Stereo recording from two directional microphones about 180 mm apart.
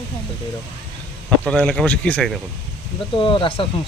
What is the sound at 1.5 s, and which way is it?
Speech, 5° left (ahead or behind).